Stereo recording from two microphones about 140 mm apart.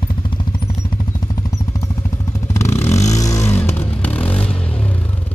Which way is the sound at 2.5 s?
20° left (ahead or behind).